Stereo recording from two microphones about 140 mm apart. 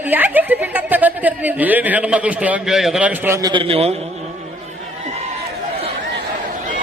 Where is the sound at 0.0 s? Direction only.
10° right (ahead or behind).